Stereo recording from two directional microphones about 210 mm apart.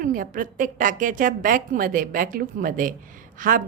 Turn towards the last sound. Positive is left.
turn(degrees=-40)  # may be behind; listen again after turning